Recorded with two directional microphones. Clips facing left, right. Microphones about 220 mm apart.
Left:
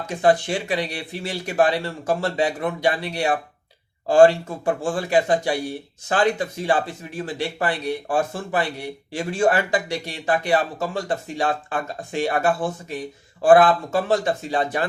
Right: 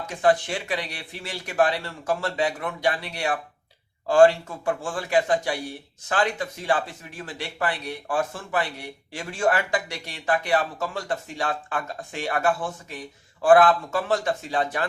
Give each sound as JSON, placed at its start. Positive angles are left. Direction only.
{"t": 0.1, "sound": "speech", "side_deg": 30}